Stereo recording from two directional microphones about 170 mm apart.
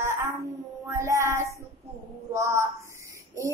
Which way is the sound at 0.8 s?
15° right (ahead or behind).